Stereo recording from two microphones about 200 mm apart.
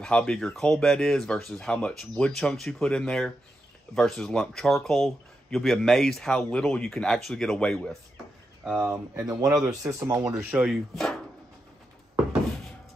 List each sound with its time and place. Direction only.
0.0 s speech: 5° left (ahead or behind)
8.6 s speech: 10° right (ahead or behind)
10.3 s speech: 5° right (ahead or behind)